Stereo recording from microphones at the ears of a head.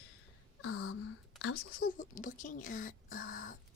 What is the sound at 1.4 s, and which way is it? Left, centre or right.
Speech, left.